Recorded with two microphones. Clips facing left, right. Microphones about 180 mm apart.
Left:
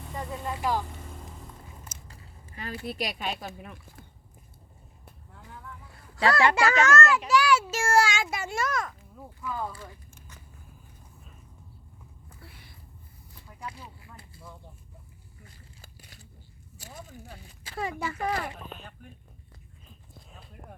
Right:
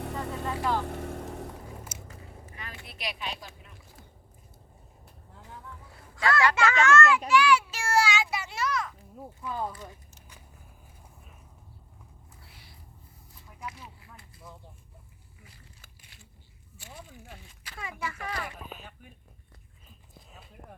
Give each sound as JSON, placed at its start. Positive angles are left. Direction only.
{"t": 0.0, "sound": "vehicle", "side_deg": -70}
{"t": 2.0, "sound": "speech", "side_deg": 35}
{"t": 6.1, "sound": "a child's voice", "side_deg": 30}
{"t": 7.3, "sound": "child singing", "side_deg": 40}
{"t": 9.1, "sound": "speech", "side_deg": -25}
{"t": 12.4, "sound": "a sound", "side_deg": 55}
{"t": 13.7, "sound": "a sound", "side_deg": 30}
{"t": 15.8, "sound": "a sound", "side_deg": 40}
{"t": 17.2, "sound": "speech", "side_deg": 30}
{"t": 18.7, "sound": "speech", "side_deg": -5}
{"t": 19.9, "sound": "clip-clop", "side_deg": 0}